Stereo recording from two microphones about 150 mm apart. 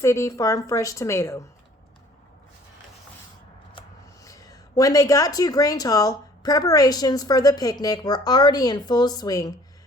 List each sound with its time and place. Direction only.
0.0 s speech: 20° left (ahead or behind)
4.2 s speech: 25° left (ahead or behind)